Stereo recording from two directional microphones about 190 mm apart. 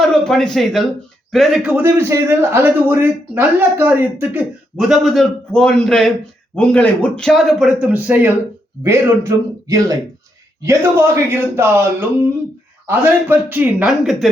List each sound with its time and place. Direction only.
0.0 s a man's voice: centre (ahead or behind)